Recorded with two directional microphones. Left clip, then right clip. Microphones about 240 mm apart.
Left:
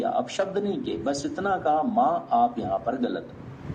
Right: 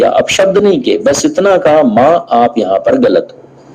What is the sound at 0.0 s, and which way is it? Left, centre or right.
Speech, right.